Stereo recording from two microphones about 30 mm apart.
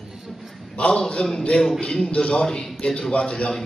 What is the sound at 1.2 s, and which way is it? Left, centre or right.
A man's voice, left.